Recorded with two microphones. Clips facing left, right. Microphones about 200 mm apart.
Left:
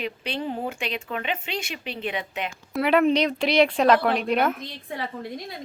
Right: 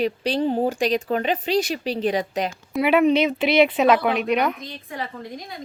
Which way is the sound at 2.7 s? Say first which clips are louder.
Right 2 dB; 5° right (ahead or behind).